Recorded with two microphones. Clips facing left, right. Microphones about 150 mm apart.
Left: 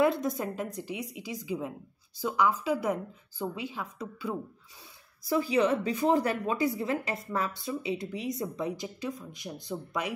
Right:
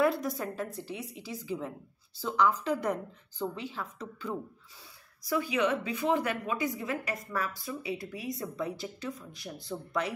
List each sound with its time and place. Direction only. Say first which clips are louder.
0.0 s speech: left 2 dB; 20° left (ahead or behind)
5.2 s a woman's voice: left 3 dB; 30° left (ahead or behind); by 10.1 s 15° left (ahead or behind)